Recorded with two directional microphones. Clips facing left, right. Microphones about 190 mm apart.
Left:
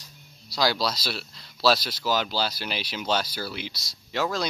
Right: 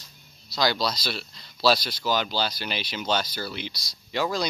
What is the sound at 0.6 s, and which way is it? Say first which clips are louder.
Speech: even; 5° left (ahead or behind).